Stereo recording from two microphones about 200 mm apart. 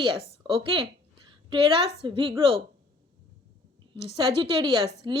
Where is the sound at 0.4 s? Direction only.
25° right (ahead or behind).